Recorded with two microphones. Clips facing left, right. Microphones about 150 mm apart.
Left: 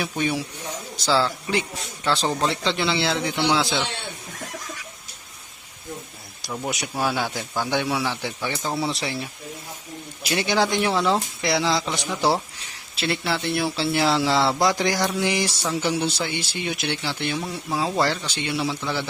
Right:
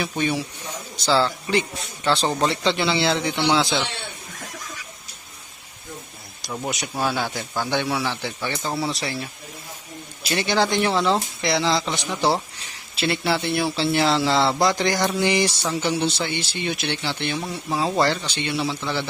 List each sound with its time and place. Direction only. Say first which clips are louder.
0.0 s speech: right 1 dB; 5° left (ahead or behind)
6.5 s speech: even; 5° left (ahead or behind)
8.9 s speech: even; 20° left (ahead or behind)
10.2 s speech: even; 10° left (ahead or behind)